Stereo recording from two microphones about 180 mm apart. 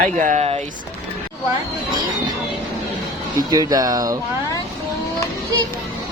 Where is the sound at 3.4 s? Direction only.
20° right (ahead or behind).